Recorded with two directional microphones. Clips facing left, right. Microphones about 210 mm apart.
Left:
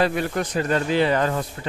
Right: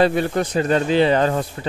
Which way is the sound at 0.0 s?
30° right (ahead or behind).